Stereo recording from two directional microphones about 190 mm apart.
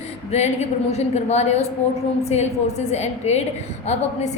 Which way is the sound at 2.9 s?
35° left (ahead or behind).